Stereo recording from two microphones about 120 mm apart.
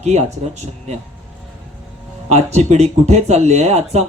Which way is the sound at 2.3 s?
70° right (ahead or behind).